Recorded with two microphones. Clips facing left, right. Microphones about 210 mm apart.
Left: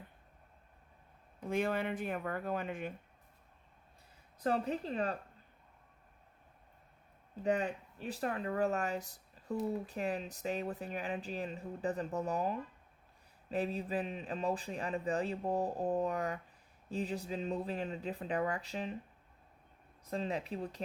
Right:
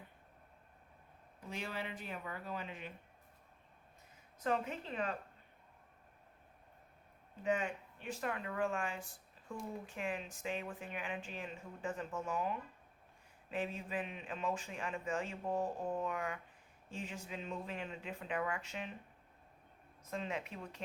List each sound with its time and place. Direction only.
1.5 s speech: 50° left (ahead or behind)
4.4 s speech: 35° left (ahead or behind)
7.4 s speech: 35° left (ahead or behind)
20.1 s speech: 35° left (ahead or behind)